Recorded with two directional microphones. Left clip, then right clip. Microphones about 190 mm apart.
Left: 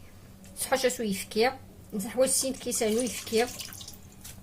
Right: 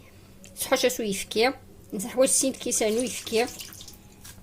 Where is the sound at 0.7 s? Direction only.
35° right (ahead or behind).